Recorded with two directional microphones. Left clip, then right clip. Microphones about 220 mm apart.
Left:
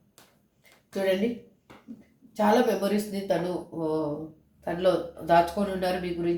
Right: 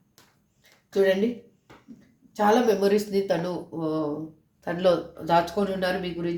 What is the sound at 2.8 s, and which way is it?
Speech, 40° right (ahead or behind).